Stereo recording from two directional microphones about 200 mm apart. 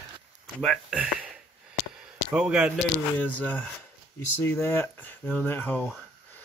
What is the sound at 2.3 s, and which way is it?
Speech, 5° right (ahead or behind).